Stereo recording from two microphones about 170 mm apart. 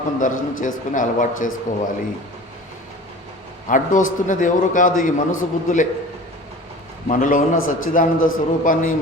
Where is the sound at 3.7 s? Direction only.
50° left (ahead or behind).